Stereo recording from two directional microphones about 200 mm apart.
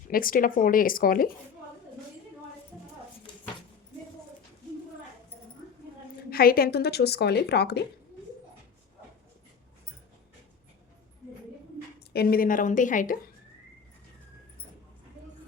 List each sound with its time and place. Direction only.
0.1 s speech: 45° left (ahead or behind)
6.3 s speech: 50° left (ahead or behind)
12.1 s speech: 50° left (ahead or behind)